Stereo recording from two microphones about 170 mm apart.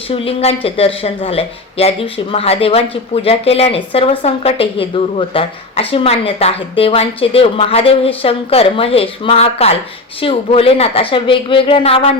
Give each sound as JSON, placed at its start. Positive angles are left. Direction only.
{"t": 0.1, "sound": "speech", "side_deg": 35}